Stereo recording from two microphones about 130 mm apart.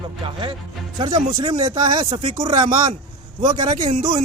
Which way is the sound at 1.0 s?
40° right (ahead or behind).